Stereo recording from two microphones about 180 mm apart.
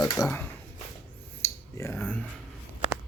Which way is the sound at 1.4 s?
15° left (ahead or behind).